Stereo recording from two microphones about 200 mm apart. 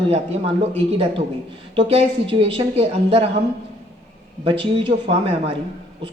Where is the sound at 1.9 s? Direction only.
25° right (ahead or behind).